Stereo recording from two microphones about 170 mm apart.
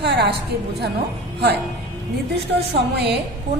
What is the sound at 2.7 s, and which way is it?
Speech, 75° right (ahead or behind).